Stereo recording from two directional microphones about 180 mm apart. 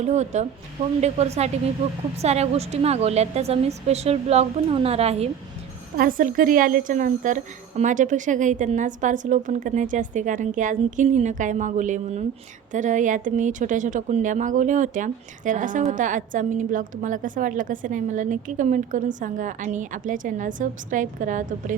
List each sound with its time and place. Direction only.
0.0 s a woman's voice: 40° right (ahead or behind)
6.0 s a woman's voice: 50° right (ahead or behind)